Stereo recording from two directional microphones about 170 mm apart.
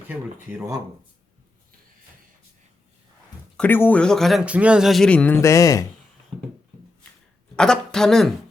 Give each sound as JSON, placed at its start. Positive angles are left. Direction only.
{"t": 3.6, "sound": "speech", "side_deg": 10}
{"t": 7.5, "sound": "speech", "side_deg": 5}